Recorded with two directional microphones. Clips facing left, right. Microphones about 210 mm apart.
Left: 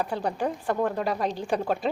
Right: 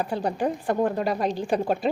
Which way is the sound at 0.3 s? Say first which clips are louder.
Right 3 dB; 15° right (ahead or behind).